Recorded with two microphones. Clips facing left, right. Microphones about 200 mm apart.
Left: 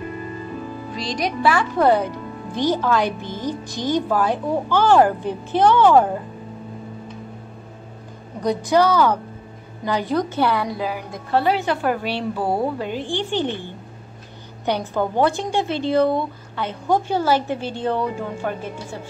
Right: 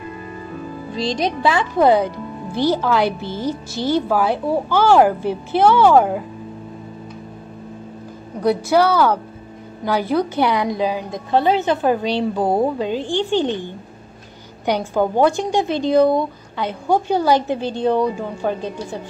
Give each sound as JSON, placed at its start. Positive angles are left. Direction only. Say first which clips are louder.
{"t": 0.9, "sound": "a woman's voice", "louder": "right 4 dB", "side_deg": -25}
{"t": 3.1, "sound": "a woman's voice", "louder": "right 3 dB", "side_deg": 15}
{"t": 3.8, "sound": "a woman's voice", "louder": "right 2 dB", "side_deg": -10}
{"t": 8.4, "sound": "a woman's voice", "louder": "right 2 dB", "side_deg": -10}
{"t": 15.0, "sound": "a woman's voice", "louder": "right 4 dB", "side_deg": -10}